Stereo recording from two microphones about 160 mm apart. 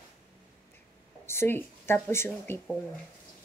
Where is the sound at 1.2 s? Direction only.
15° left (ahead or behind).